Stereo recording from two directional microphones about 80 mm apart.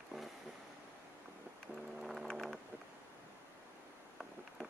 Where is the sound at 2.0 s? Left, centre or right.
Centre.